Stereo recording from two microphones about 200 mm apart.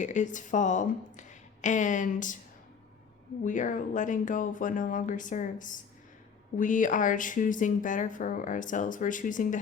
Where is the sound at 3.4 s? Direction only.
40° left (ahead or behind).